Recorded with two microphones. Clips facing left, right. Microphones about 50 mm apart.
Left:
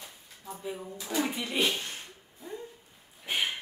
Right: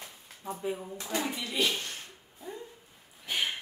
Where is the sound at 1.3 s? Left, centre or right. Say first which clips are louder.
Left 1 dB; left.